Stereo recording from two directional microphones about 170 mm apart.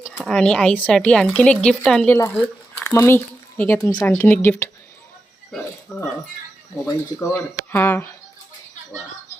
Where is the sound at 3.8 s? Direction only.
25° left (ahead or behind).